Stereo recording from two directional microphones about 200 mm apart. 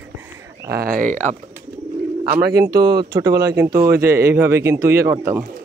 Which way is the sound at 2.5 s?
15° right (ahead or behind).